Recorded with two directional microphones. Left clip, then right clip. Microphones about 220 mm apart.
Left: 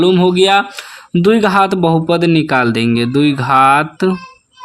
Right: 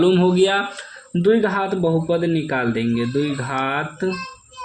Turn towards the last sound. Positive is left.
turn(degrees=40)  # may be behind; listen again after turning